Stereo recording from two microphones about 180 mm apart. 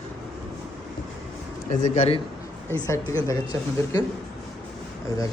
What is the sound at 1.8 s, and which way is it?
Speech, 40° left (ahead or behind).